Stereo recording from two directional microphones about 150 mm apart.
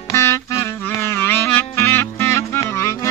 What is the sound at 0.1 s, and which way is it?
Music, 20° left (ahead or behind).